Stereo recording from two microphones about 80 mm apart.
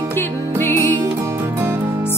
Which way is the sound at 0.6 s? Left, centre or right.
Left.